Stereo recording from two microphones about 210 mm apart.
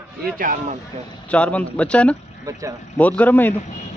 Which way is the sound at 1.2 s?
5° left (ahead or behind).